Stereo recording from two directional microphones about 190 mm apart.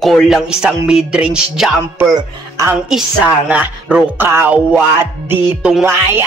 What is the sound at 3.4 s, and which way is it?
Music, 5° right (ahead or behind).